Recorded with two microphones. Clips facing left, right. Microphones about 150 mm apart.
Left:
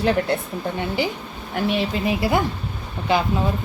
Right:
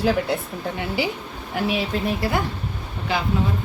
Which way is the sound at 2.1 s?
15° left (ahead or behind).